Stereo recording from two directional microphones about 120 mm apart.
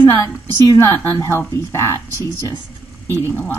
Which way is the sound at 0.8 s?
20° left (ahead or behind).